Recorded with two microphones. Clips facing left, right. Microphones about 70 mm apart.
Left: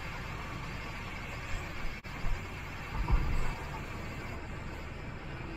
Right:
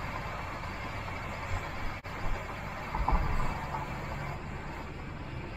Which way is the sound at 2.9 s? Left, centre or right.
Right.